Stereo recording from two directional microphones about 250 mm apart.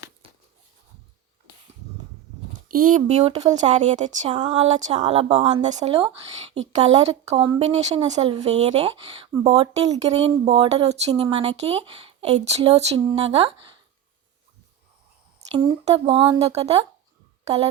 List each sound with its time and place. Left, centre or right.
2.6 s speech: right
15.4 s speech: right